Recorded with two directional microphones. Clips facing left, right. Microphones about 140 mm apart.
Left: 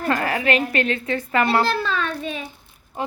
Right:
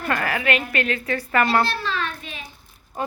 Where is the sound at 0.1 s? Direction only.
30° left (ahead or behind).